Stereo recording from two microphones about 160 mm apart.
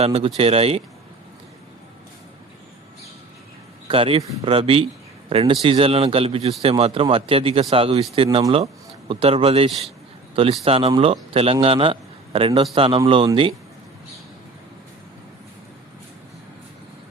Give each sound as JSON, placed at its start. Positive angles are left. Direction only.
{"t": 0.0, "sound": "speech", "side_deg": -40}
{"t": 3.8, "sound": "a man's voice", "side_deg": -35}